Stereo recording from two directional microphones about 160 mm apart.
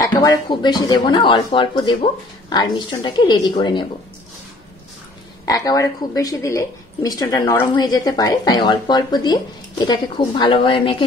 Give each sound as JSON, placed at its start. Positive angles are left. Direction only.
{"t": 0.0, "sound": "speech", "side_deg": 25}
{"t": 5.4, "sound": "speech", "side_deg": 25}